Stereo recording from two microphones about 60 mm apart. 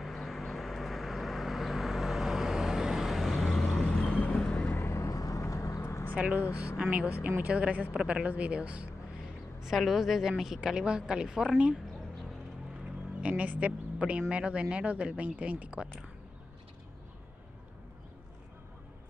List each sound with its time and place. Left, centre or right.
0.0 s vehicle: centre
4.7 s vehicle: left
5.1 s vehicle: left
6.8 s speech: right
9.6 s a woman's voice: centre
13.2 s speech: right